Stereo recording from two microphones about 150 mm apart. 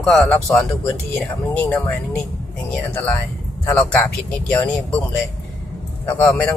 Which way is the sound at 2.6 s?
10° left (ahead or behind).